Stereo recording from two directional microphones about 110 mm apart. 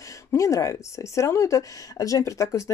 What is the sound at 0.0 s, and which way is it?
Speech, 30° left (ahead or behind).